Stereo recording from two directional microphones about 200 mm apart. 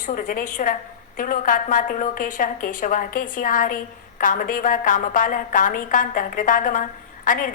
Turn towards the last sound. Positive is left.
turn(degrees=45)  # may be behind; listen again after turning